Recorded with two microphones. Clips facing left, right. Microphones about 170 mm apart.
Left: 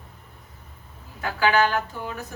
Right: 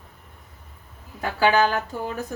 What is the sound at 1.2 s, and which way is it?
Speech, 40° right (ahead or behind).